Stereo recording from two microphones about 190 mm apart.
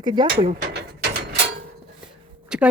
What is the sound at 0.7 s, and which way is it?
Mechanisms, 60° right (ahead or behind).